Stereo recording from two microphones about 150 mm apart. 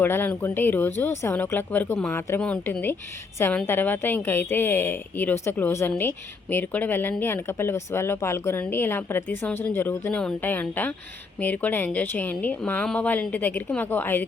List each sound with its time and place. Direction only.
0.0 s speech: 15° left (ahead or behind)